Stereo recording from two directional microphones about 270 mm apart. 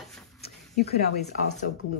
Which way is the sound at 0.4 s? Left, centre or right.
Left.